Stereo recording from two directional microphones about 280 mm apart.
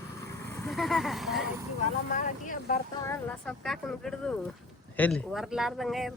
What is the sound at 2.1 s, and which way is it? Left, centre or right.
Speech, left.